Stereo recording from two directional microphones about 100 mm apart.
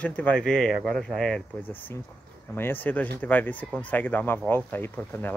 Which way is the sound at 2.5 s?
20° left (ahead or behind).